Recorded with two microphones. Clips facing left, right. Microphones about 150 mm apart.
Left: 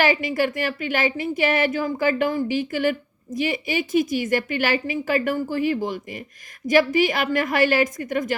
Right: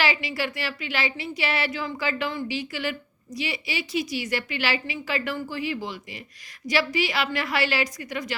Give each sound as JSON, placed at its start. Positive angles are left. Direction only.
{"t": 0.0, "sound": "speech", "side_deg": 50}